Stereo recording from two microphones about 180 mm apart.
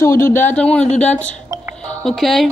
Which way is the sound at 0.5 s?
5° left (ahead or behind).